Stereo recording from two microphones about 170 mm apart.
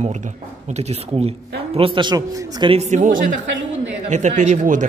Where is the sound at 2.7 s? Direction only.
45° right (ahead or behind).